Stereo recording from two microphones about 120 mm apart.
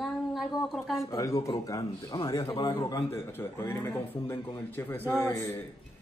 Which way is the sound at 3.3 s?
20° left (ahead or behind).